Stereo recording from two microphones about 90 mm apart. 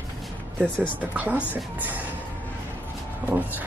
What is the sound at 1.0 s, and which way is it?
Speech, 20° right (ahead or behind).